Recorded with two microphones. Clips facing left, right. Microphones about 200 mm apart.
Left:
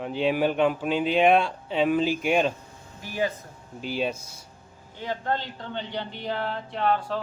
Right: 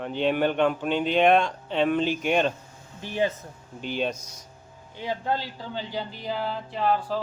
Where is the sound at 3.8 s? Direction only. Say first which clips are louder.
Even; 5° left (ahead or behind).